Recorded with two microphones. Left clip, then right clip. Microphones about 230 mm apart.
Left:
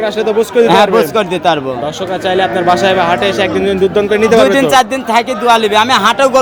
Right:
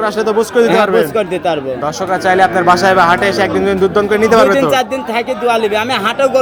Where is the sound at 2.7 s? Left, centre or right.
Centre.